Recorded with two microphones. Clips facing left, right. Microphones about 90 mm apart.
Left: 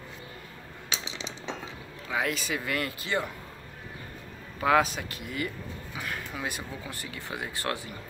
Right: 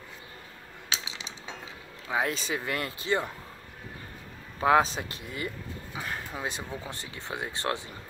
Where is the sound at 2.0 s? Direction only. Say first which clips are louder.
Right 1 dB; 25° right (ahead or behind).